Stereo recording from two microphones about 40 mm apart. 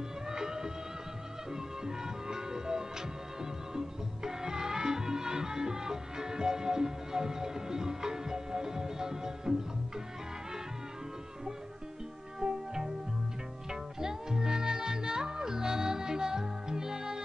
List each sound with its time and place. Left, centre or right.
0.3 s music: centre
12.4 s music: centre
13.7 s music: centre